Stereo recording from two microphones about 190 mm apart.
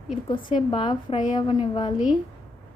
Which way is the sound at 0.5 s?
25° left (ahead or behind).